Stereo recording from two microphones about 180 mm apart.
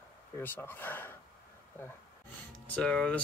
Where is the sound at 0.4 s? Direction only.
10° left (ahead or behind).